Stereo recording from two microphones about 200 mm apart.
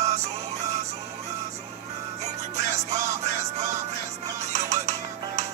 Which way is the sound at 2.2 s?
35° right (ahead or behind).